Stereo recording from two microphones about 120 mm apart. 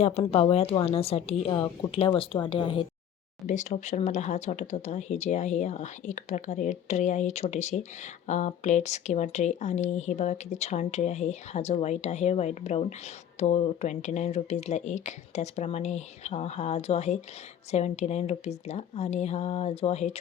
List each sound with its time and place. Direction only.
0.0 s speech: 60° left (ahead or behind)
3.4 s speech: 80° left; by 20.1 s 65° left (ahead or behind)